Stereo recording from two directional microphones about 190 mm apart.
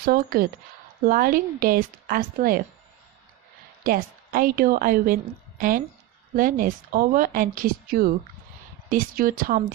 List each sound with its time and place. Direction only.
0.0 s a woman's voice: 50° right (ahead or behind)
3.8 s a woman's voice: 50° right (ahead or behind)